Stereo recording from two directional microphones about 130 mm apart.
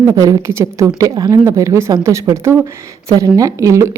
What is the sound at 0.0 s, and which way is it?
A woman's voice, 25° right (ahead or behind).